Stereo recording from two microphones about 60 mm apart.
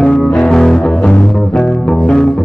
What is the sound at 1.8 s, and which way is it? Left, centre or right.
Music, centre.